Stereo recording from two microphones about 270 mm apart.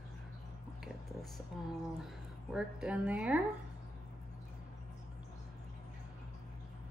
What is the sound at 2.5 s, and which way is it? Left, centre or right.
Speech, centre.